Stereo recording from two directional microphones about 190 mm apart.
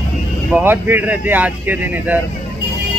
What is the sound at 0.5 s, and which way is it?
Speech, 10° right (ahead or behind).